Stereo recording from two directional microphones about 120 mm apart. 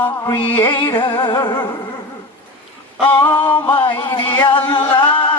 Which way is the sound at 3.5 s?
40° left (ahead or behind).